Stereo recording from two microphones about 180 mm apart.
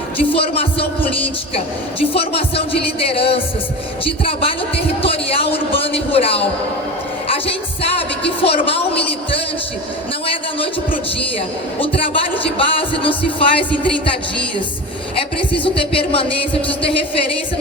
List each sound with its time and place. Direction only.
0.3 s speech: 30° left (ahead or behind)
2.1 s speech: 30° left (ahead or behind)
5.0 s a sound: 30° left (ahead or behind)
7.4 s music: 30° left (ahead or behind)
11.8 s speech: 30° left (ahead or behind)
15.6 s speech: 30° left (ahead or behind)